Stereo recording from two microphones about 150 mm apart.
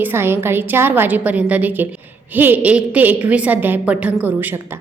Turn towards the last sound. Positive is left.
turn(degrees=-10)  # may be behind; listen again after turning